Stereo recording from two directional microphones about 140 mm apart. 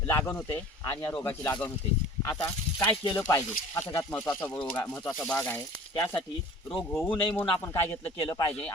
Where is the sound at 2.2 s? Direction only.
25° left (ahead or behind).